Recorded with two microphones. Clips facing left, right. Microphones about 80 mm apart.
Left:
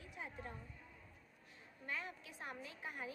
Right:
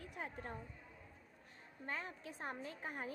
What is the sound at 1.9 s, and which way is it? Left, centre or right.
A woman's voice, right.